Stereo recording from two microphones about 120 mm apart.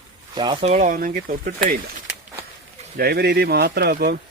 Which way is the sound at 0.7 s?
90° right.